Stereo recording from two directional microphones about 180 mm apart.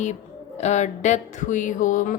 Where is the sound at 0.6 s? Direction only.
40° left (ahead or behind).